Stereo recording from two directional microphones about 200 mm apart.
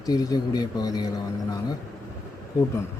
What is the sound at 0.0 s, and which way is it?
Speech, 20° left (ahead or behind).